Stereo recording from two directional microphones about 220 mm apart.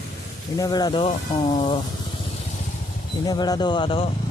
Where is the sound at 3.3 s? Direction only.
20° left (ahead or behind).